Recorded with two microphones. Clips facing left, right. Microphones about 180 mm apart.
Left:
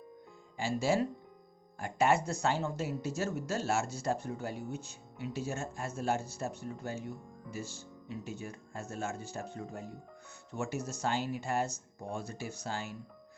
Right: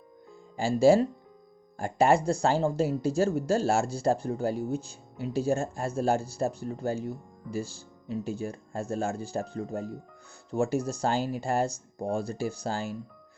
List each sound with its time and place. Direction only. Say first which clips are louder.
0.5 s speech: right 10 dB; 35° right (ahead or behind)